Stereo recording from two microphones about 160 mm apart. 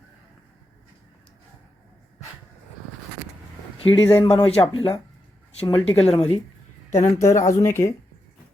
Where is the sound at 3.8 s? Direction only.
35° left (ahead or behind).